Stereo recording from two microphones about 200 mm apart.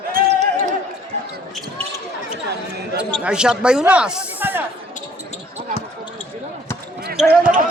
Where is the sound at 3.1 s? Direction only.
5° right (ahead or behind).